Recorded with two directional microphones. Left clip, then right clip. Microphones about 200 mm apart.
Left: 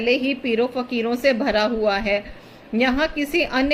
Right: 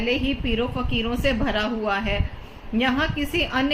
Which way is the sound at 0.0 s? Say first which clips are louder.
Left 4 dB; 15° left (ahead or behind).